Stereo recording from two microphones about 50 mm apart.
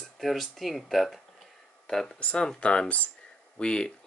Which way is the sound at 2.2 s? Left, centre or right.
Left.